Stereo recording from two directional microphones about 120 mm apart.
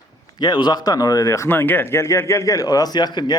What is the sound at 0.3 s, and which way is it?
Speech, 40° left (ahead or behind).